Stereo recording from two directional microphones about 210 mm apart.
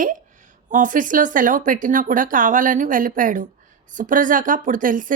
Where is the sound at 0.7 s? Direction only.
40° right (ahead or behind).